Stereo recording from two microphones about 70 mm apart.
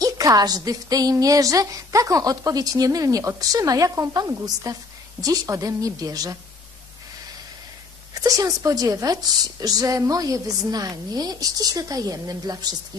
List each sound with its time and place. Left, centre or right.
0.0 s a woman's voice: right
4.1 s speech: right
4.7 s a woman's voice: right
8.1 s a woman's voice: right